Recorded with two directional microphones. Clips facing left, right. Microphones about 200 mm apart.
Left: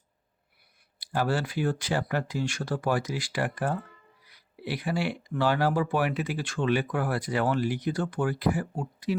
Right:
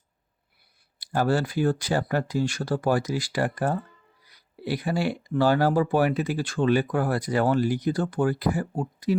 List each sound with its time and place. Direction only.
0.9 s speech: 45° right (ahead or behind)